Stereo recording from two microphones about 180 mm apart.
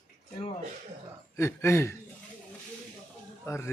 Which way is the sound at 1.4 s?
15° left (ahead or behind).